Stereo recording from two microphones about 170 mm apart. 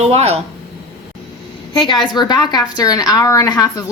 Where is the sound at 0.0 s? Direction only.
40° right (ahead or behind).